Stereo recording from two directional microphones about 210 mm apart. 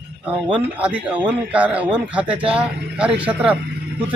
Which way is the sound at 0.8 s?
5° right (ahead or behind).